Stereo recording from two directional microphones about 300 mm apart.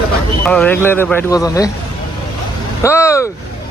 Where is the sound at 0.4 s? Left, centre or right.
Centre.